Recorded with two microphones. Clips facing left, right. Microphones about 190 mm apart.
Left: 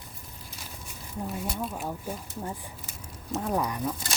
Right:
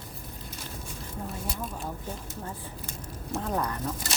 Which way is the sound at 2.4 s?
10° left (ahead or behind).